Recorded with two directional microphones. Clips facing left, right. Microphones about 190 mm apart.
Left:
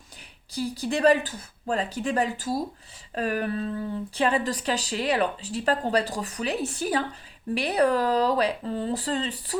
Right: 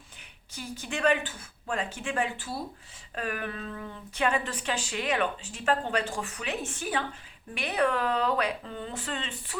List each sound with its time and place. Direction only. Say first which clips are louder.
0.5 s speech: left 9 dB; 35° left (ahead or behind)